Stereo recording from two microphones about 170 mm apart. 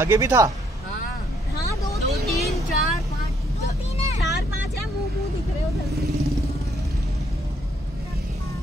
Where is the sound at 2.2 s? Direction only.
Centre (ahead or behind).